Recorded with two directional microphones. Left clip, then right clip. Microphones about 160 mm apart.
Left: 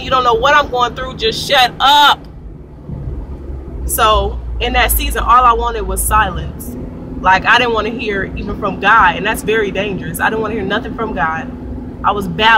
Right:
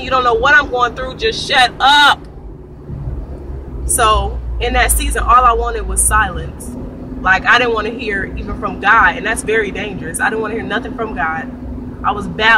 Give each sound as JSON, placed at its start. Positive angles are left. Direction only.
{"t": 0.0, "sound": "speech", "side_deg": 15}
{"t": 3.9, "sound": "speech", "side_deg": 15}